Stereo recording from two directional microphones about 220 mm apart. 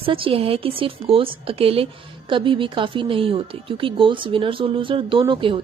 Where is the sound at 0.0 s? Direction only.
25° right (ahead or behind).